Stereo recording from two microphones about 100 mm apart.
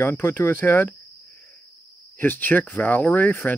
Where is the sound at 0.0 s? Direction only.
20° left (ahead or behind).